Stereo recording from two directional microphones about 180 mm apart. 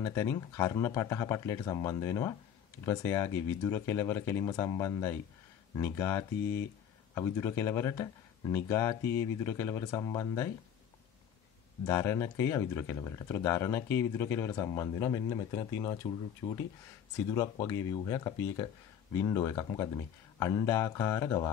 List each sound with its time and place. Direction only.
0.0 s speech: 15° left (ahead or behind)
11.8 s speech: 15° left (ahead or behind)